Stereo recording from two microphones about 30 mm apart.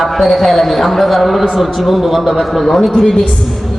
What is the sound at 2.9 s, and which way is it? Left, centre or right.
Speech, centre.